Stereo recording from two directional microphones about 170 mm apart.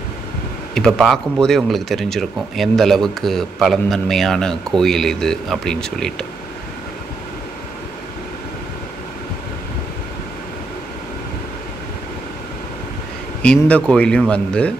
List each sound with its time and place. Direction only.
0.7 s speech: 5° left (ahead or behind)
13.4 s speech: 5° left (ahead or behind)